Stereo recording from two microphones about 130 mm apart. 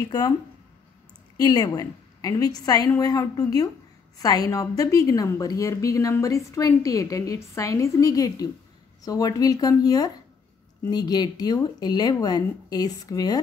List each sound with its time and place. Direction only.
1.4 s a woman's voice: 30° left (ahead or behind)